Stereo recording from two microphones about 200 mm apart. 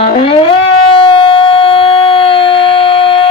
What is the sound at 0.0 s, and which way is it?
Music, 30° left (ahead or behind).